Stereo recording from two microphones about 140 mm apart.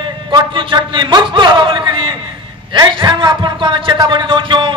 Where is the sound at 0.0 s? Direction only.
35° right (ahead or behind).